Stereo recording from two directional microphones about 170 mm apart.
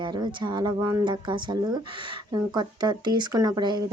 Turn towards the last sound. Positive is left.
turn(degrees=-25)  # may be behind; listen again after turning